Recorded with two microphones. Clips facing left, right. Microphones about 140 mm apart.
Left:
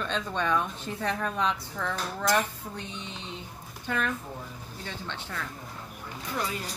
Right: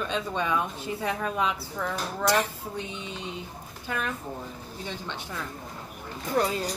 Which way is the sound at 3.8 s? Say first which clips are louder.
Left 1 dB; 10° right (ahead or behind).